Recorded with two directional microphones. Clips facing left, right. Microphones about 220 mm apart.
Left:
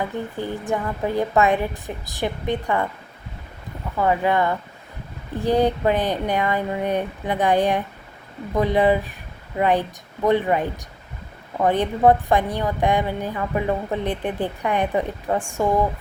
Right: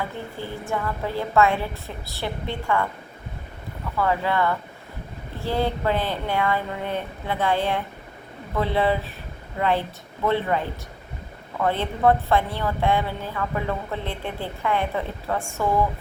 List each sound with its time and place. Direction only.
0.3 s a woman's voice: 15° left (ahead or behind)
3.9 s a woman's voice: 20° left (ahead or behind)